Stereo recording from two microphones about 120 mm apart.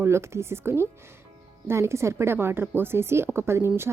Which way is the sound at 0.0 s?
20° right (ahead or behind).